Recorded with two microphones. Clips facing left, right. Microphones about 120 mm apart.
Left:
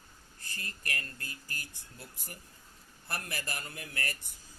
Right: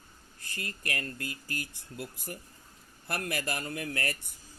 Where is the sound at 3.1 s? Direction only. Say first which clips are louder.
Right 6 dB; 55° right (ahead or behind).